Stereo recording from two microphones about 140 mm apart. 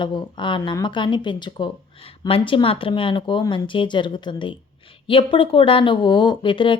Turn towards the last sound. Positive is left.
turn(degrees=35)  # may be behind; listen again after turning